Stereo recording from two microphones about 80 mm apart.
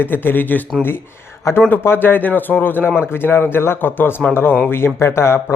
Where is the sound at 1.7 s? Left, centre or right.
Left.